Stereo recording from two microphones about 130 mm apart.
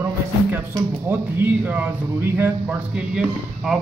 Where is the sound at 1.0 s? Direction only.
15° right (ahead or behind).